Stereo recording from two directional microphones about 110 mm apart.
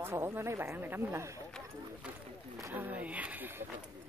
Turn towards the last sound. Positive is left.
turn(degrees=-15)  # may be behind; listen again after turning